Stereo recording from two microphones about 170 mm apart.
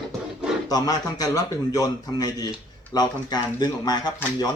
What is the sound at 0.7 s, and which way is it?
Speech, 20° left (ahead or behind).